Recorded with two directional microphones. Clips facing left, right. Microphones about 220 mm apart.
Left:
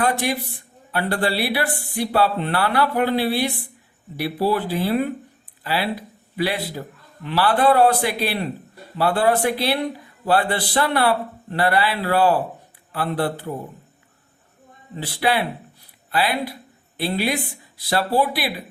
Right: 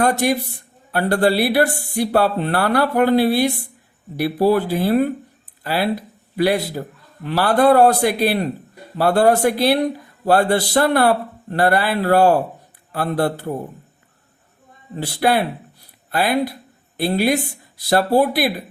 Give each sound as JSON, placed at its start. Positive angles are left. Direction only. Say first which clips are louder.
{"t": 0.0, "sound": "speech", "louder": "right 4 dB", "side_deg": -45}
{"t": 14.9, "sound": "speech", "louder": "right 4 dB", "side_deg": -45}